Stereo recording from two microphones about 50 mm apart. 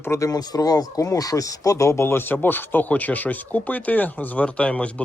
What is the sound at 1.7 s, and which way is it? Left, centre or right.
A man's voice, left.